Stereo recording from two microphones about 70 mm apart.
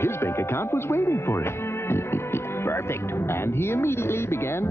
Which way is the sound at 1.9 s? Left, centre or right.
Left.